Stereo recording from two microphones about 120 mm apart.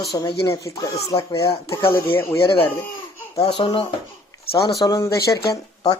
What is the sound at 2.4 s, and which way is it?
Speech, 45° left (ahead or behind).